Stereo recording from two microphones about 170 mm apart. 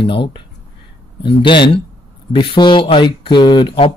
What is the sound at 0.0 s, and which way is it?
Speech, 30° left (ahead or behind).